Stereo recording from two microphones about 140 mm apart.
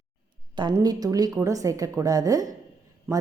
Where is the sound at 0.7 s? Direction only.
25° right (ahead or behind).